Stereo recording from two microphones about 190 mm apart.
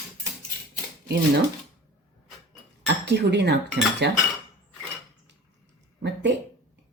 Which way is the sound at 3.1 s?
60° right (ahead or behind).